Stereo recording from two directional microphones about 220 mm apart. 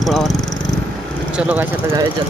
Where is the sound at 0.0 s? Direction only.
Centre (ahead or behind).